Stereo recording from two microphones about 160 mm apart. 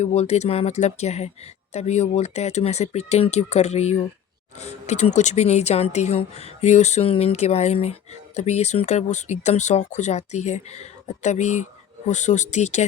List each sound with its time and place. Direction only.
0.0 s speech: 40° left (ahead or behind)